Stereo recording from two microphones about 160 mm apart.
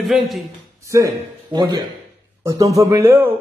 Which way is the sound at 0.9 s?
25° right (ahead or behind).